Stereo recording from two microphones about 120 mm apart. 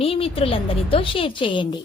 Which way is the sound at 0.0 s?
50° left (ahead or behind).